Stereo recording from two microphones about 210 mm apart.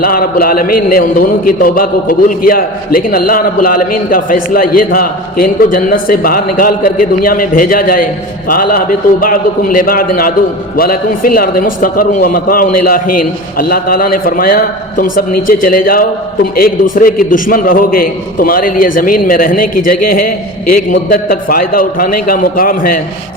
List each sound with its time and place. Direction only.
0.0 s a man's voice: 45° left (ahead or behind)